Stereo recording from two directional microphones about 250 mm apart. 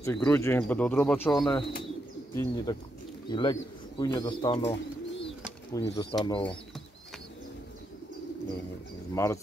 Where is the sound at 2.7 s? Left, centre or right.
Centre.